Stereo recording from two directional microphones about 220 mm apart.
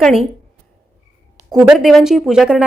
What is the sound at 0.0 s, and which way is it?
Speech, centre (ahead or behind).